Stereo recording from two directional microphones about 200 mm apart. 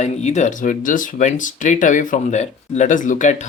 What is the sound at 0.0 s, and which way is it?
Speech, 35° left (ahead or behind).